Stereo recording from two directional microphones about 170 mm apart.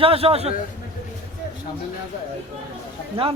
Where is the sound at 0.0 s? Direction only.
35° right (ahead or behind).